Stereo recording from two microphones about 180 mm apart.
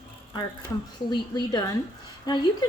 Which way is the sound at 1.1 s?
25° left (ahead or behind).